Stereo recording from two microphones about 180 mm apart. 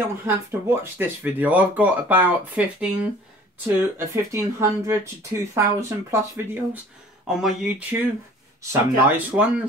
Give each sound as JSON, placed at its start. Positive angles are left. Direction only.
{"t": 0.2, "sound": "speech", "side_deg": -15}
{"t": 9.0, "sound": "speech", "side_deg": -10}